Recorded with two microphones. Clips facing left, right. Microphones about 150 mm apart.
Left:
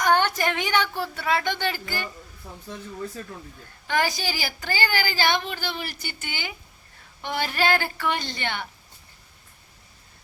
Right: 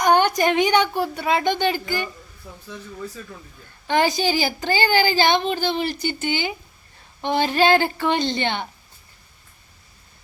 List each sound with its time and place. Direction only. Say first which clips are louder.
0.0 s a woman's voice: right 4 dB; 15° right (ahead or behind)
3.8 s speech: right 6 dB; 25° right (ahead or behind)